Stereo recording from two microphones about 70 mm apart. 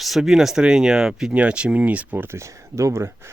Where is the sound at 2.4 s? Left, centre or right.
Right.